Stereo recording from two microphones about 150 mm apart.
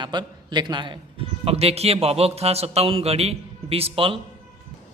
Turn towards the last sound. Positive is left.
turn(degrees=-40)  # may be behind; listen again after turning